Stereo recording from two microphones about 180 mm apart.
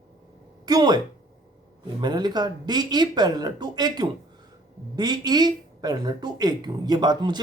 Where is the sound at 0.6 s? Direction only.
25° right (ahead or behind).